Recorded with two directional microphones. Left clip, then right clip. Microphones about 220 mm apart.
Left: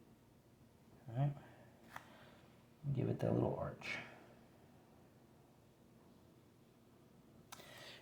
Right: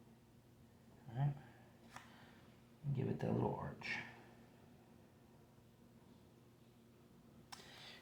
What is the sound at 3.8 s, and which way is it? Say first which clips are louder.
Speech: right 1 dB; 35° left (ahead or behind).